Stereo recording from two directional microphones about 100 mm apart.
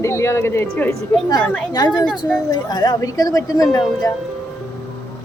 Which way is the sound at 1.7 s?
40° left (ahead or behind).